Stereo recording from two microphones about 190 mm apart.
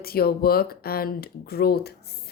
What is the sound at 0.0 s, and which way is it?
Speech, 55° left (ahead or behind).